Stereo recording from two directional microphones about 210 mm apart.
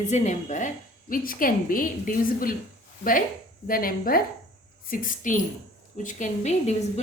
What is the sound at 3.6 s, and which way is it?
A woman's voice, 40° left (ahead or behind).